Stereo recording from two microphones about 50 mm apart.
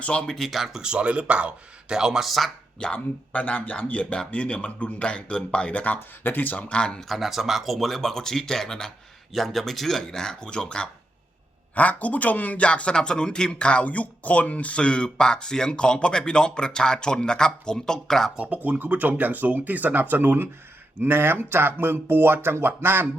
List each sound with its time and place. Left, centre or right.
0.0 s speech: left
0.3 s speech: centre
0.8 s speech: right
2.9 s speech: left
6.2 s speech: left
6.7 s speech: centre
7.1 s speech: centre
11.7 s speech: left; by 18.3 s centre
18.3 s speech: right